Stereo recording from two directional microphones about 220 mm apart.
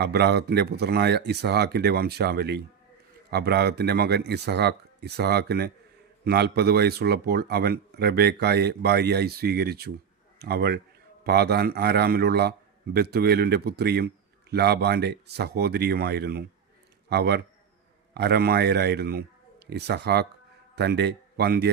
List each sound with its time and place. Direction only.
0.0 s a man's voice: 50° right (ahead or behind)